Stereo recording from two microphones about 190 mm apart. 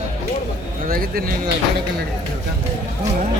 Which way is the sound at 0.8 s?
50° right (ahead or behind).